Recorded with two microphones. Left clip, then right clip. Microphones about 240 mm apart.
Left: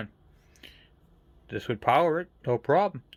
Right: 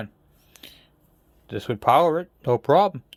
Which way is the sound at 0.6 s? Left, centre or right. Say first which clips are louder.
Right 4 dB; centre.